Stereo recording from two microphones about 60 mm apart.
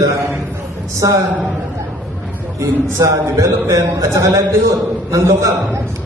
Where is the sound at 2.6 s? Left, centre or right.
Right.